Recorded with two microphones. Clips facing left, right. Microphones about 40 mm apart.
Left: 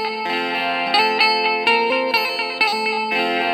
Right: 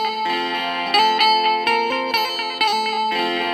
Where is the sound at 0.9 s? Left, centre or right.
Left.